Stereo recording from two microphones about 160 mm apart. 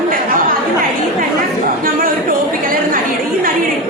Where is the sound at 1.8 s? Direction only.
65° right (ahead or behind).